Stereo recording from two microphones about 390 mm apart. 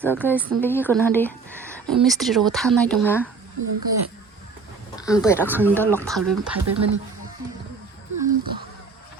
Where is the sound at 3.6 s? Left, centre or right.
Right.